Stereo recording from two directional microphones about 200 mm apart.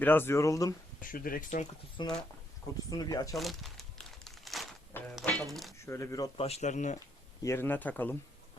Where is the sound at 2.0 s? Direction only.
20° left (ahead or behind).